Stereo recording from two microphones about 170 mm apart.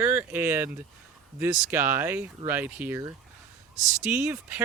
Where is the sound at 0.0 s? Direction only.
10° right (ahead or behind).